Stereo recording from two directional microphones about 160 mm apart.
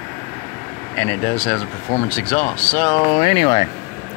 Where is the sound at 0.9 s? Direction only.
15° left (ahead or behind).